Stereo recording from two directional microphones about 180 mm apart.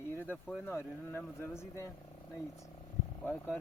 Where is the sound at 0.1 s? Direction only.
10° left (ahead or behind).